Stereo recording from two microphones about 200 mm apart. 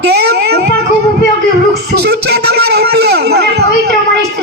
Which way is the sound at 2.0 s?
55° right (ahead or behind).